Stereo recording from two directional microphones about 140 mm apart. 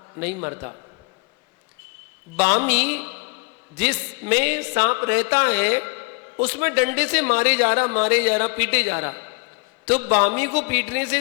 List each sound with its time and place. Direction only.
0.4 s speech: 25° right (ahead or behind)
2.3 s speech: 20° right (ahead or behind)